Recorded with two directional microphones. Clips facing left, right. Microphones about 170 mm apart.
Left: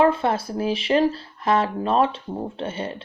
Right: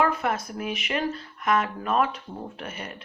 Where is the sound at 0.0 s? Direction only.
30° left (ahead or behind).